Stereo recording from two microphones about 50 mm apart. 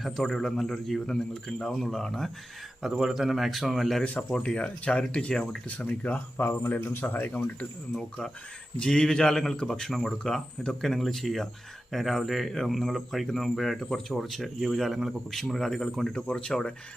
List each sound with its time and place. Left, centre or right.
0.2 s speech: centre
3.0 s speech: centre
4.2 s speech: centre
5.6 s speech: left
6.3 s speech: left
8.9 s speech: centre